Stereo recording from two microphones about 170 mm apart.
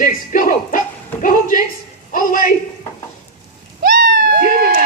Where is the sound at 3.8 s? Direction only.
55° right (ahead or behind).